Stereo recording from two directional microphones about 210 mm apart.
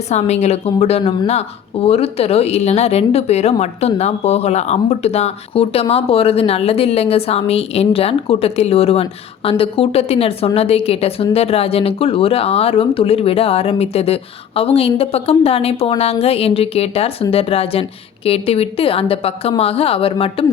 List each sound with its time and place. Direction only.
0.1 s a woman's voice: 30° left (ahead or behind)